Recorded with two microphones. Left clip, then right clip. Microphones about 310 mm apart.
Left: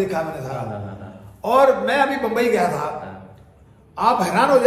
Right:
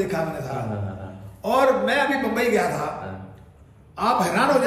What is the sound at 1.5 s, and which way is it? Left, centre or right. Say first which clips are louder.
A man's voice: left 4 dB; centre.